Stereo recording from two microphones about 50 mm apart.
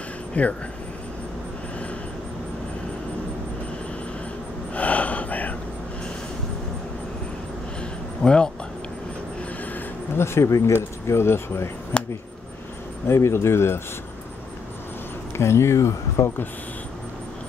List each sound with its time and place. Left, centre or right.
0.3 s speech: left
4.7 s gasp: left
8.2 s speech: centre
10.1 s speech: left
13.1 s speech: left
15.3 s speech: left